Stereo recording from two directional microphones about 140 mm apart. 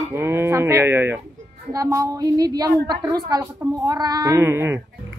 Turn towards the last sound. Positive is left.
turn(degrees=-15)  # may be behind; listen again after turning